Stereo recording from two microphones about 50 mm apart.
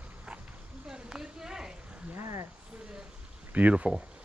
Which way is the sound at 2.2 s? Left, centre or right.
Right.